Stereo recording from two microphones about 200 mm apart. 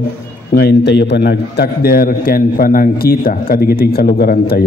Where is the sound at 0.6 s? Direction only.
55° left (ahead or behind).